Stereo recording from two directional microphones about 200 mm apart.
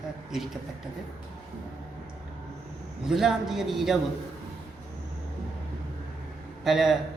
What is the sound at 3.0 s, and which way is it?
Speech, centre (ahead or behind).